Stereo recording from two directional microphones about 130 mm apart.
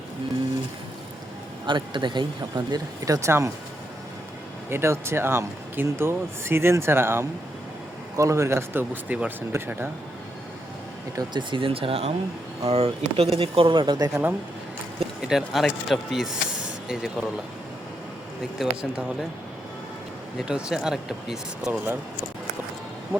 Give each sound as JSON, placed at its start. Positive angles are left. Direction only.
{"t": 1.6, "sound": "speech", "side_deg": -40}
{"t": 4.7, "sound": "speech", "side_deg": -20}
{"t": 11.1, "sound": "speech", "side_deg": -35}
{"t": 15.2, "sound": "speech", "side_deg": -5}
{"t": 18.6, "sound": "speech", "side_deg": -5}
{"t": 20.4, "sound": "speech", "side_deg": -5}